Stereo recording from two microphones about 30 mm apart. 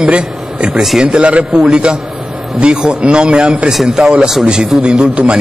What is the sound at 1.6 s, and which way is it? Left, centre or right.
A man's voice, right.